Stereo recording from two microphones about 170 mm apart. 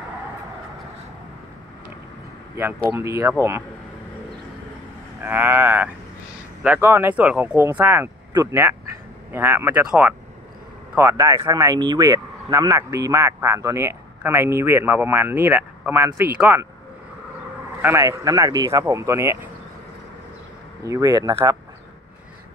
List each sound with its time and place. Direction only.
2.9 s speech: 15° right (ahead or behind)
5.2 s speech: 10° right (ahead or behind)
17.8 s speech: 20° right (ahead or behind)
20.8 s speech: 20° right (ahead or behind)